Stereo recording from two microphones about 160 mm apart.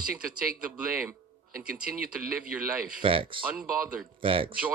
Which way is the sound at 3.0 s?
35° right (ahead or behind).